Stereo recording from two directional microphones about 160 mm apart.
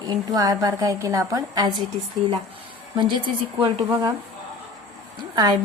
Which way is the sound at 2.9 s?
30° right (ahead or behind).